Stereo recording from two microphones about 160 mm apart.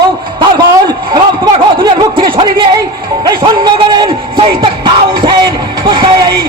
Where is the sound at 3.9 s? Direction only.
30° right (ahead or behind).